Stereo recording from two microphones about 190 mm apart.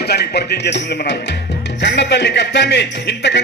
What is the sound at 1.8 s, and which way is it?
Speech, 65° left (ahead or behind).